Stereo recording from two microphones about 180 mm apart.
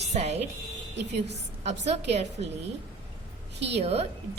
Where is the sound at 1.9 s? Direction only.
35° right (ahead or behind).